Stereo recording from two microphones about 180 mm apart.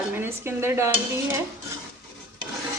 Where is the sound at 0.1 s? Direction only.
10° right (ahead or behind).